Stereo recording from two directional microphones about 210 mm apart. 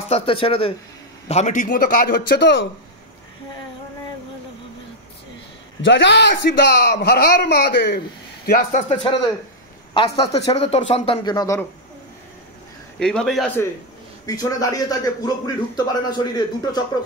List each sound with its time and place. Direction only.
0.1 s a man's voice: 25° left (ahead or behind); by 2.7 s 60° left (ahead or behind)
5.9 s a man's voice: 60° left (ahead or behind)
8.8 s speech: 30° left (ahead or behind)
13.0 s a man's voice: 5° left (ahead or behind)
14.2 s a man's voice: 15° left (ahead or behind)